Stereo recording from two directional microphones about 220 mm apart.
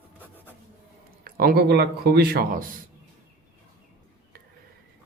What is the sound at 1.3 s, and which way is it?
Speech, 45° right (ahead or behind).